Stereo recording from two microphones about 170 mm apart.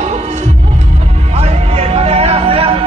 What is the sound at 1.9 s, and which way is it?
Music, 35° right (ahead or behind).